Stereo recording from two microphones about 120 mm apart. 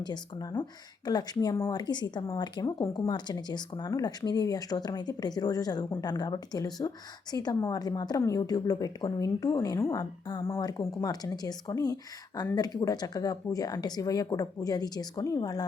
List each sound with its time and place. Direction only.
0.0 s a woman's voice: 35° left (ahead or behind)